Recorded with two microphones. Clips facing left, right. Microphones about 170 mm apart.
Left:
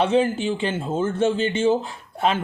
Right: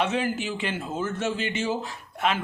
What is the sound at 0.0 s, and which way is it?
Speech, 30° left (ahead or behind).